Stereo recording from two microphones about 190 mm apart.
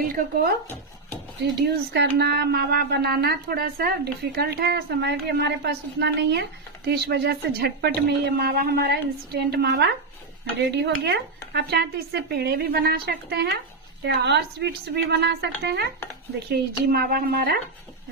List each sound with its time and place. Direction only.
0.0 s speech: 50° right (ahead or behind)
1.4 s speech: 60° right (ahead or behind)